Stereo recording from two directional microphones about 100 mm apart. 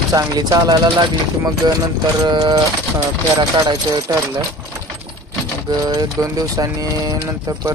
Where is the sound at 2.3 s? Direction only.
45° right (ahead or behind).